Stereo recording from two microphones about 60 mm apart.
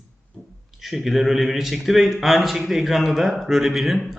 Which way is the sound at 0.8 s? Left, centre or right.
Centre.